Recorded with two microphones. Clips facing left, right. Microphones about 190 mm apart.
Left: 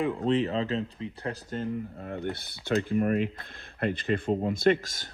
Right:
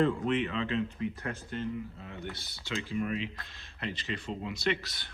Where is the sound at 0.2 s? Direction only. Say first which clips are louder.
Left 5 dB; 35° left (ahead or behind).